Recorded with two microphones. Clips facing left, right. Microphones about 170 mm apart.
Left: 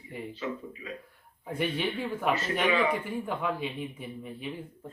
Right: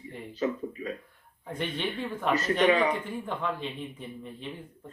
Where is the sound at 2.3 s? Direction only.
40° right (ahead or behind).